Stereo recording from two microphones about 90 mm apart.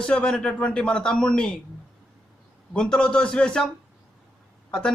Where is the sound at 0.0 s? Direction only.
10° left (ahead or behind).